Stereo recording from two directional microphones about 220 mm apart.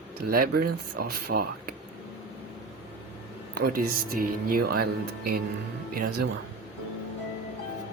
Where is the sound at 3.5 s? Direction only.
40° right (ahead or behind).